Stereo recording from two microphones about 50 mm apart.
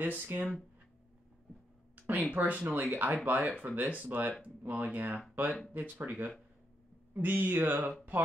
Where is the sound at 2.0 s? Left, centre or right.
Right.